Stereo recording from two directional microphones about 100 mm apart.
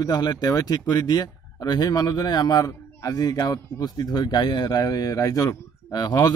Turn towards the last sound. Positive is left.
turn(degrees=40)  # may be behind; listen again after turning